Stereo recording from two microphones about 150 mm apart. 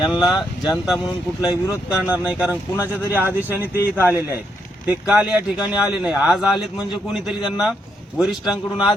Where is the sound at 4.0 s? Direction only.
15° left (ahead or behind).